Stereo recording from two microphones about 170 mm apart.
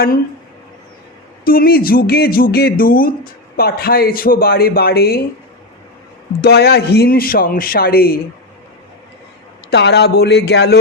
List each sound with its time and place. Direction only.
1.5 s a man's voice: 60° left (ahead or behind)
6.4 s a man's voice: 70° left (ahead or behind)
9.6 s speech: 80° left